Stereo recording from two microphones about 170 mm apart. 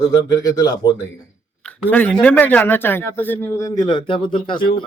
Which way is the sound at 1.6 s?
10° left (ahead or behind).